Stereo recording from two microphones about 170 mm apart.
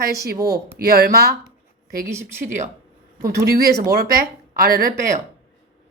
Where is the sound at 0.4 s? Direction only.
65° right (ahead or behind).